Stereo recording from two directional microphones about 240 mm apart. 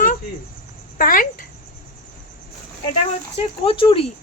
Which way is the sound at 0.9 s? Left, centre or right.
Left.